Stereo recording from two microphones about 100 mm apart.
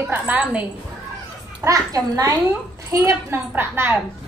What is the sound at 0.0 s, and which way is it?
Speech, 20° right (ahead or behind).